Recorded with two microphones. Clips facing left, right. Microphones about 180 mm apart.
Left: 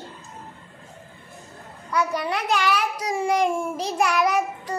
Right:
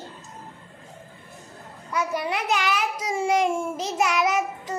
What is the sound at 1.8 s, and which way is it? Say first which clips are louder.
A child's voice: left 2 dB; 20° right (ahead or behind).